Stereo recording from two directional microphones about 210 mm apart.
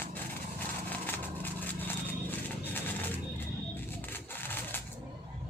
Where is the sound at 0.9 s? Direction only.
10° left (ahead or behind).